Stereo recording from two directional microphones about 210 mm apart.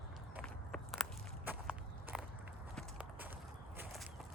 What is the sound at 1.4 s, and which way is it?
Walk, 10° right (ahead or behind).